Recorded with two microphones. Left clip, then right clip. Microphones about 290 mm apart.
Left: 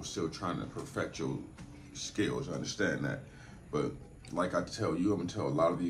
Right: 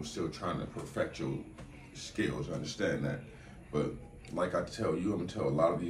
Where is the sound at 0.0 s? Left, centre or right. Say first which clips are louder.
Left 1 dB; centre.